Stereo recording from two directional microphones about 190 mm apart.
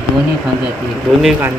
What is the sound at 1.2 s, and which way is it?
Speech, 5° right (ahead or behind).